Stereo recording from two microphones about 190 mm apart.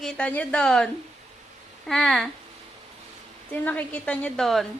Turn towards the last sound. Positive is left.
turn(degrees=0)  # may be behind; listen again after turning